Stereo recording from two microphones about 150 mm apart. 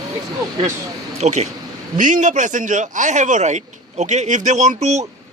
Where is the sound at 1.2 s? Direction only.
50° right (ahead or behind).